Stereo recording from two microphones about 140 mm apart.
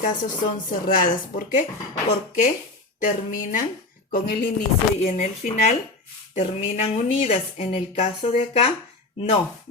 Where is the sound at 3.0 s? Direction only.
70° left (ahead or behind).